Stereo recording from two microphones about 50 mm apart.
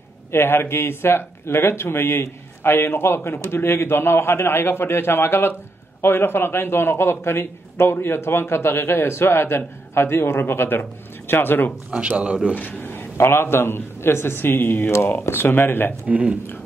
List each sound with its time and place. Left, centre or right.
0.3 s speech: left
11.9 s speech: right
12.5 s a man's voice: left
14.9 s speech: left
16.1 s speech: right